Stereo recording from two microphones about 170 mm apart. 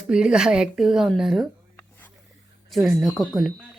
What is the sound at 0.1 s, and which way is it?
Speech, 5° right (ahead or behind).